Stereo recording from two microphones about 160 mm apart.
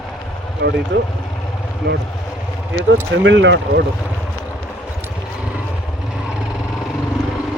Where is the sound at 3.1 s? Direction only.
90° right.